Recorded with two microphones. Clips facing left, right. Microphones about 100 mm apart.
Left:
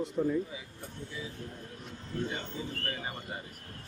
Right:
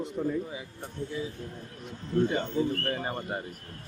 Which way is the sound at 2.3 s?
55° right (ahead or behind).